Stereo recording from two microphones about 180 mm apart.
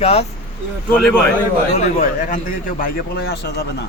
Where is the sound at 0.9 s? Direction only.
10° left (ahead or behind).